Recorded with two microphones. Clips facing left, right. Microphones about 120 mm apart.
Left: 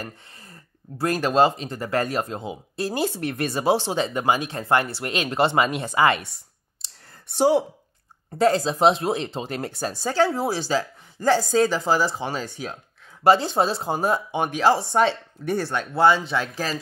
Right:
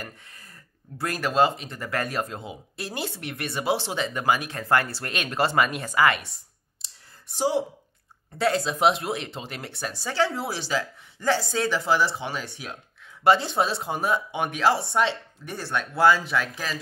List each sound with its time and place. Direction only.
0.0 s speech: 30° left (ahead or behind)
2.7 s speech: 35° left (ahead or behind)
7.3 s speech: 55° left (ahead or behind)
8.4 s speech: 35° left (ahead or behind)
15.0 s speech: 55° left (ahead or behind)
15.7 s speech: 30° left (ahead or behind)